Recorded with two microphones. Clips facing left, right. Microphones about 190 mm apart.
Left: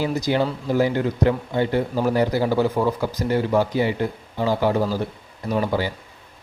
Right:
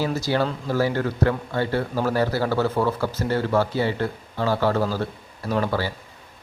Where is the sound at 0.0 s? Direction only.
15° left (ahead or behind).